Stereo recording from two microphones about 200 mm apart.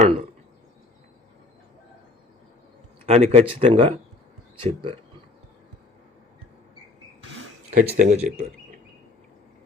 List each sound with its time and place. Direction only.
0.0 s speech: 35° right (ahead or behind)
3.1 s speech: 30° right (ahead or behind)
7.7 s speech: 40° right (ahead or behind)